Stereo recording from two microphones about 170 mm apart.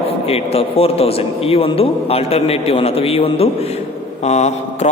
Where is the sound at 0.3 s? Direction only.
35° left (ahead or behind).